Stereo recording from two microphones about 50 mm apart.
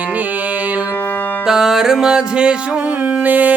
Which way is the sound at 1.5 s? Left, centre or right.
Centre.